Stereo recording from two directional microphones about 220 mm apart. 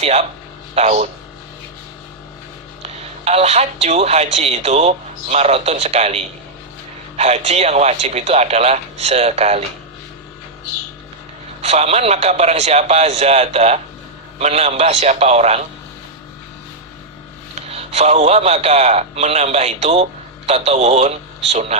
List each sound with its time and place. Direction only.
0.0 s speech: 30° right (ahead or behind)
2.8 s speech: 30° right (ahead or behind)
11.6 s speech: 30° right (ahead or behind)
17.5 s a man's voice: 30° right (ahead or behind)